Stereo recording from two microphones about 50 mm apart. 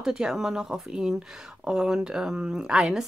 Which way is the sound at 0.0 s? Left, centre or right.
Centre.